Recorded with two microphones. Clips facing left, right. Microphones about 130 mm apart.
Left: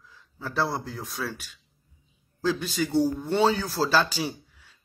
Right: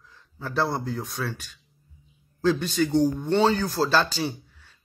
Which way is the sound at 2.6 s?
5° left (ahead or behind).